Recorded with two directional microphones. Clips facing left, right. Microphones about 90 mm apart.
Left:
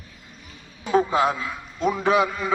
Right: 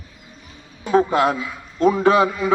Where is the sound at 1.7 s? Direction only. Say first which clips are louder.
Right 8 dB; 55° right (ahead or behind).